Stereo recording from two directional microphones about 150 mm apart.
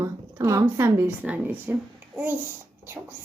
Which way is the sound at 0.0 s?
20° right (ahead or behind).